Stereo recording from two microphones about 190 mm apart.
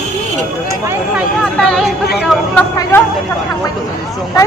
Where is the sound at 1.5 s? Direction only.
Centre (ahead or behind).